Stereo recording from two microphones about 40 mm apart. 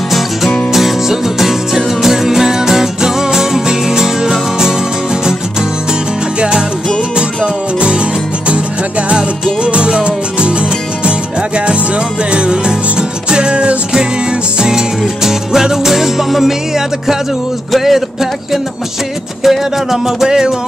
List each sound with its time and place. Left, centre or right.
0.7 s music: centre
9.7 s music: right
12.3 s music: right
15.2 s music: centre
17.7 s a sound: centre
19.4 s music: centre